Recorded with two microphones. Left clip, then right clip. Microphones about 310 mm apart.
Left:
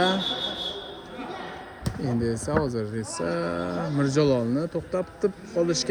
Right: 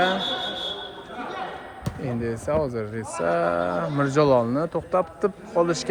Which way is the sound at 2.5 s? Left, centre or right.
Centre.